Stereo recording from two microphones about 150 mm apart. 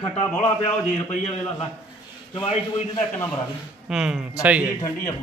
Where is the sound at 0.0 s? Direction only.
40° left (ahead or behind).